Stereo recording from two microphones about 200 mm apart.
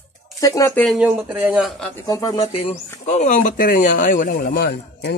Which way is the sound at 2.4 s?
30° left (ahead or behind).